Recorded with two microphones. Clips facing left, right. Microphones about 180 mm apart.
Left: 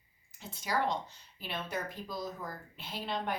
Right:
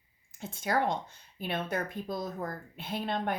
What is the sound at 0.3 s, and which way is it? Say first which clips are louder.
Speech: right 4 dB; 50° right (ahead or behind).